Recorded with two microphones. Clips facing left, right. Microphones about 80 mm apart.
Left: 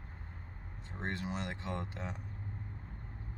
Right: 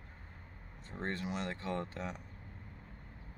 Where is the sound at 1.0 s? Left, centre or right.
Left.